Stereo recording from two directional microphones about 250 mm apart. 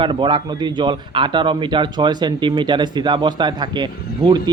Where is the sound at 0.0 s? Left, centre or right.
Centre.